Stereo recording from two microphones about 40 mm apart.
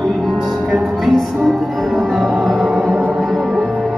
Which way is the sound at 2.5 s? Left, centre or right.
Centre.